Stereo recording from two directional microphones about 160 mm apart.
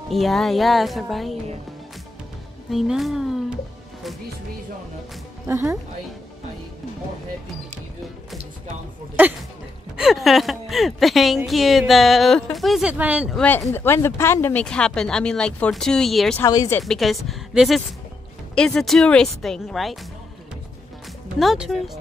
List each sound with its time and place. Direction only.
0.1 s speech: centre (ahead or behind)
2.7 s speech: centre (ahead or behind)
5.5 s speech: 20° right (ahead or behind)
9.9 s speech: centre (ahead or behind)
13.6 s speech: 15° left (ahead or behind)
16.3 s speech: 20° left (ahead or behind)
16.8 s speech: centre (ahead or behind)
21.4 s speech: centre (ahead or behind)